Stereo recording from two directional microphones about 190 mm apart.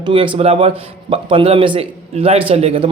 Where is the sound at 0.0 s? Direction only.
30° right (ahead or behind).